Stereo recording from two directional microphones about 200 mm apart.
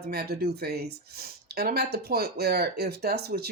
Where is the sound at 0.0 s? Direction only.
50° right (ahead or behind).